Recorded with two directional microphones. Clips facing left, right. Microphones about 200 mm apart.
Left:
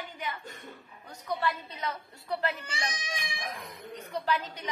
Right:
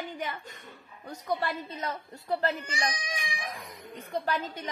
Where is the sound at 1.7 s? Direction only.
45° right (ahead or behind).